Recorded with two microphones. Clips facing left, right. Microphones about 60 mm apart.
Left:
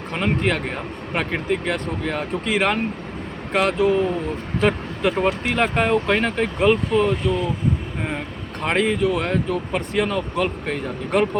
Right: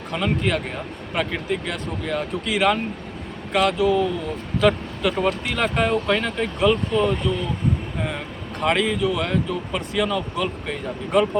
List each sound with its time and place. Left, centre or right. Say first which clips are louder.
0.1 s speech: left 1 dB; left
8.6 s speech: left 1 dB; left